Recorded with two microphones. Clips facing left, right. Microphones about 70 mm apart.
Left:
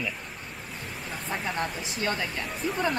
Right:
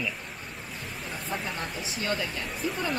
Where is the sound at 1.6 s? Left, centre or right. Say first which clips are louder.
Left 3 dB; left.